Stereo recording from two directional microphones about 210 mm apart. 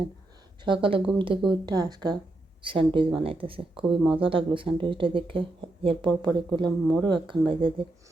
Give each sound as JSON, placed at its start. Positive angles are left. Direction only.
{"t": 0.6, "sound": "speech", "side_deg": -25}